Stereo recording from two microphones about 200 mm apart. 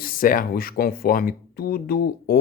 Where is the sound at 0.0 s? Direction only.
45° left (ahead or behind).